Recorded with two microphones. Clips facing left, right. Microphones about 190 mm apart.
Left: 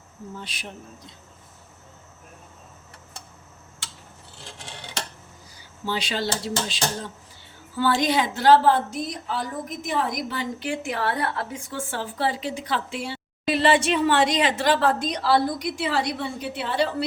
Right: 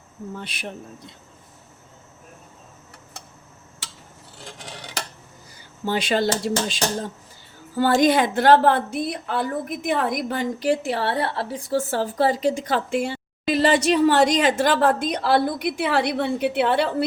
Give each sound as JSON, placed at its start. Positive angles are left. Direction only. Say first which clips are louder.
{"t": 0.3, "sound": "speech", "louder": "right 4 dB", "side_deg": -60}
{"t": 5.8, "sound": "a woman's voice", "louder": "right 6 dB", "side_deg": -50}
{"t": 7.8, "sound": "a woman's voice", "louder": "right 5 dB", "side_deg": -45}